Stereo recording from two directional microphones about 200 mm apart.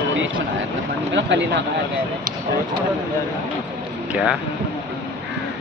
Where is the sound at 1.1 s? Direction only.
60° right (ahead or behind).